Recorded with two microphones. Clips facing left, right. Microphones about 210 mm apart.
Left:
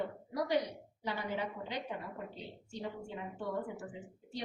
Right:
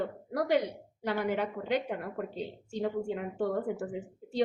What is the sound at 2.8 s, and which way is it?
Speech, 70° right (ahead or behind).